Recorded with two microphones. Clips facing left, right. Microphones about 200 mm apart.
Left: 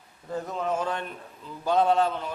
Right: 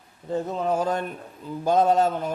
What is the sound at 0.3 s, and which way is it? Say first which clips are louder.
A man's voice: right 4 dB; 30° right (ahead or behind).